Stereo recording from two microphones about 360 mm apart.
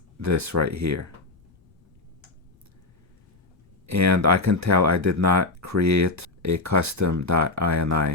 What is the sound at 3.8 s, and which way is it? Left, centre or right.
Speech, right.